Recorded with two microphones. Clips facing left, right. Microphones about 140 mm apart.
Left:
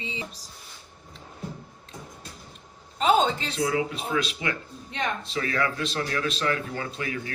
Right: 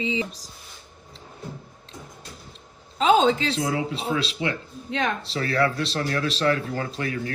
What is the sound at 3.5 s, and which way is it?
Speech, 30° right (ahead or behind).